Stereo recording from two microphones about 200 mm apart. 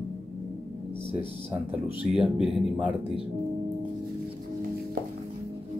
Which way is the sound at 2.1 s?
Centre (ahead or behind).